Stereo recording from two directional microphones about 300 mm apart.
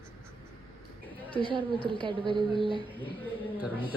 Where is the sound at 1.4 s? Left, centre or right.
Centre.